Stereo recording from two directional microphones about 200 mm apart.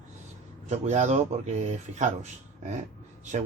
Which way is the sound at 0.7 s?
35° right (ahead or behind).